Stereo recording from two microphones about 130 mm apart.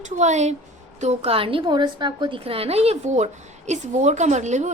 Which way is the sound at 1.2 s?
45° right (ahead or behind).